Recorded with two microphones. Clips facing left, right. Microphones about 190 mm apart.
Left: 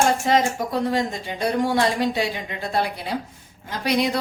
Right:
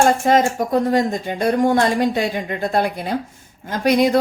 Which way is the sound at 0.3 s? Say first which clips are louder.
Right 4 dB; 50° right (ahead or behind).